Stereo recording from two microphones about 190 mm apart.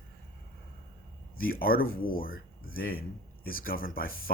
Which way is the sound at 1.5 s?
50° left (ahead or behind).